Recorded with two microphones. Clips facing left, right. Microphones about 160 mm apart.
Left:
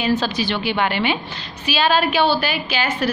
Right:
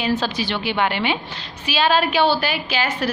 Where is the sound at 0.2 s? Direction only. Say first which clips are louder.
Left 2 dB; 25° right (ahead or behind).